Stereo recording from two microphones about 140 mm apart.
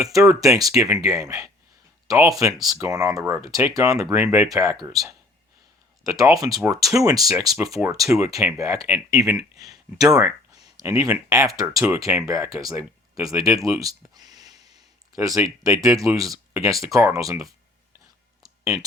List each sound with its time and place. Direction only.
0.0 s speech: 25° right (ahead or behind)
6.0 s speech: 25° right (ahead or behind)
6.6 s speech: centre (ahead or behind)
6.9 s speech: 25° right (ahead or behind)
7.5 s speech: 5° right (ahead or behind)
8.3 s speech: 20° right (ahead or behind)
14.5 s a sound: 50° left (ahead or behind)
15.1 s speech: 25° right (ahead or behind)